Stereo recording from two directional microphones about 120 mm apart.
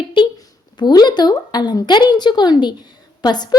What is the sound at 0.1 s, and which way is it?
A woman's voice, 40° left (ahead or behind).